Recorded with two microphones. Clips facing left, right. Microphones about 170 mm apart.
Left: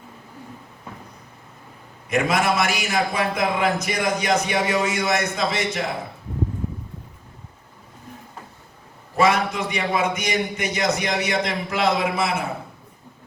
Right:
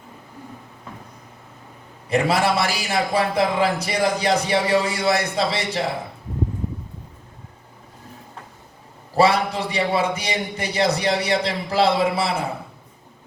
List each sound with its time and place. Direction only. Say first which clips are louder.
2.0 s a man's voice: right 1 dB; 30° right (ahead or behind)
9.1 s a man's voice: right 2 dB; 30° right (ahead or behind)